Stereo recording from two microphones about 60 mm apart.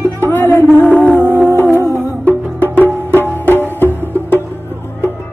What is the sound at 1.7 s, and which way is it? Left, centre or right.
Music, left.